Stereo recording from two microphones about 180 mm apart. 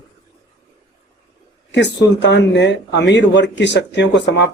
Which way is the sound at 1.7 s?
75° left (ahead or behind).